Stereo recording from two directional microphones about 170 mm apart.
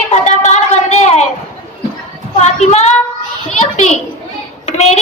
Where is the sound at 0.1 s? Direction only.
40° left (ahead or behind).